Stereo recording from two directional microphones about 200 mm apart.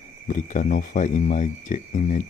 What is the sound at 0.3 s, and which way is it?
Speech, 40° left (ahead or behind).